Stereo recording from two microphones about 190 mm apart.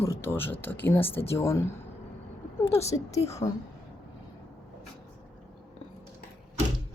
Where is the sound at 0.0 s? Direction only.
10° left (ahead or behind).